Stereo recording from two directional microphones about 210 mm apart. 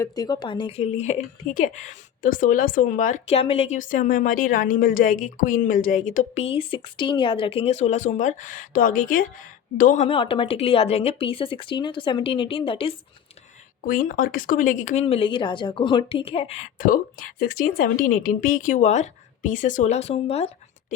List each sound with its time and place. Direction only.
0.0 s a woman's voice: 20° left (ahead or behind)
13.8 s a woman's voice: 40° left (ahead or behind)